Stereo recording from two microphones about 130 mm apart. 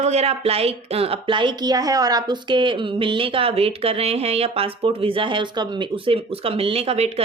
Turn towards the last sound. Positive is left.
turn(degrees=-55)  # may be behind; listen again after turning